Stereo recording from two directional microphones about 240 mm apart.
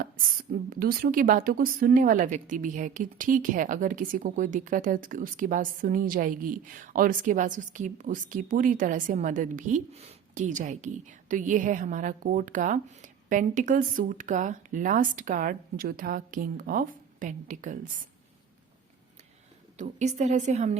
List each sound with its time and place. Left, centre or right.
0.7 s a woman's voice: right
19.7 s a woman's voice: right